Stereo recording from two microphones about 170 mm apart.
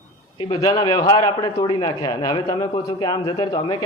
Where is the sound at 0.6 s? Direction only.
25° left (ahead or behind).